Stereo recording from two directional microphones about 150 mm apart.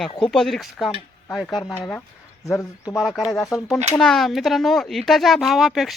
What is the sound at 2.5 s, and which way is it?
Speech, 20° left (ahead or behind).